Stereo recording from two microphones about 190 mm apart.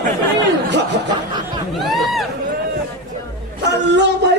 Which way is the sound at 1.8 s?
Centre (ahead or behind).